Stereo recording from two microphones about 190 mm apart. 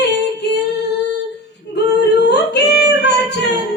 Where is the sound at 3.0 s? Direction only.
65° left (ahead or behind).